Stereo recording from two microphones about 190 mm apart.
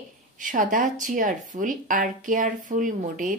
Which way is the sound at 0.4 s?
45° right (ahead or behind).